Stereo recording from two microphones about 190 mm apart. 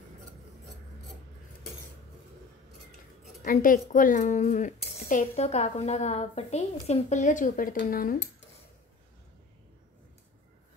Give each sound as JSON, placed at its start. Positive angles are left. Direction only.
{"t": 3.4, "sound": "a woman's voice", "side_deg": 45}